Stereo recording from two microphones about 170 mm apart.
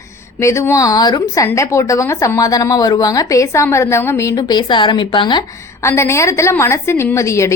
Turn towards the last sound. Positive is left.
turn(degrees=15)  # may be behind; listen again after turning